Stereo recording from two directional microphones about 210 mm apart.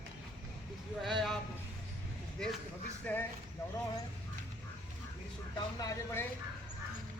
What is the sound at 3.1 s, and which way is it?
Speech, 5° left (ahead or behind).